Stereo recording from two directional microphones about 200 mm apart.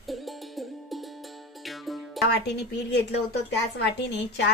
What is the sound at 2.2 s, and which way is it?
Speech, 60° left (ahead or behind).